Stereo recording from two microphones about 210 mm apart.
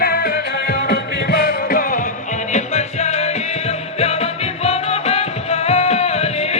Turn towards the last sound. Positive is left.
turn(degrees=30)  # may be behind; listen again after turning